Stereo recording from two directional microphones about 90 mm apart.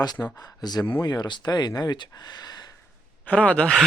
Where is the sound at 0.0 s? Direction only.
50° left (ahead or behind).